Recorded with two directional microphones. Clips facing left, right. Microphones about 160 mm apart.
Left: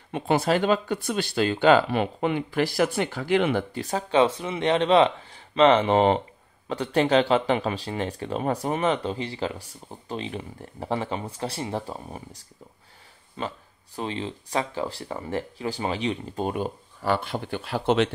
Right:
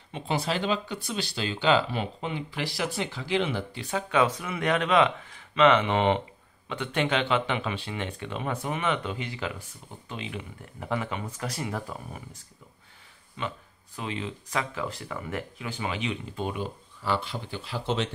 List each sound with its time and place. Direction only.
0.1 s speech: 50° left (ahead or behind); by 12.4 s 30° left (ahead or behind)
13.4 s speech: 35° left (ahead or behind); by 18.1 s 65° left (ahead or behind)